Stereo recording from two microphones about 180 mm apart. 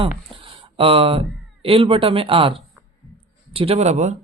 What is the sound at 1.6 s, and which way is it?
Speech, 30° right (ahead or behind).